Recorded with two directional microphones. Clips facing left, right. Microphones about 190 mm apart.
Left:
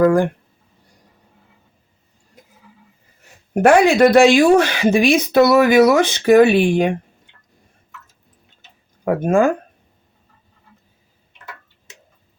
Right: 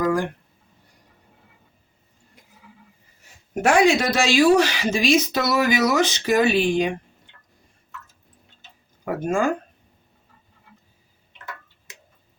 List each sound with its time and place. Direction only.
0.0 s speech: 50° left (ahead or behind)
3.5 s speech: 55° left (ahead or behind)
9.0 s speech: 55° left (ahead or behind)